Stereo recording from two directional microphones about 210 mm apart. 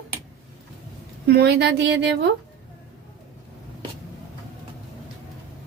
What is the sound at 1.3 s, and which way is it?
Speech, 55° right (ahead or behind).